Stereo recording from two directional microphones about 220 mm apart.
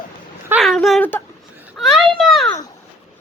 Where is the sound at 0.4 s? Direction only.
5° right (ahead or behind).